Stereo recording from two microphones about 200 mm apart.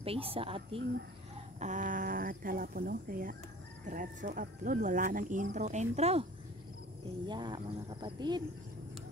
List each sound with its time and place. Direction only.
0.0 s speech: 30° right (ahead or behind)
1.6 s speech: 40° right (ahead or behind)
7.2 s speech: 20° right (ahead or behind)